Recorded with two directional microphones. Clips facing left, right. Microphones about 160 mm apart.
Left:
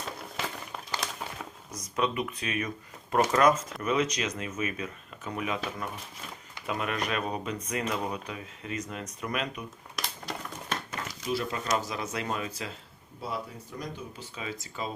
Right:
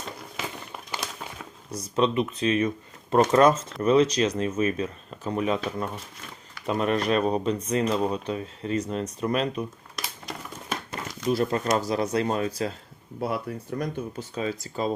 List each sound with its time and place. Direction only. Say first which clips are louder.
0.0 s a sound: right 1 dB; 5° right (ahead or behind)
1.7 s speech: right 6 dB; 30° right (ahead or behind)
6.7 s speech: right 8 dB; 35° right (ahead or behind)
9.9 s a sound: even; centre (ahead or behind)
11.1 s speech: right 8 dB; 50° right (ahead or behind)
11.8 s speech: right 9 dB; 35° right (ahead or behind)
13.1 s speech: right 7 dB; 60° right (ahead or behind)
14.2 s speech: right 9 dB; 40° right (ahead or behind)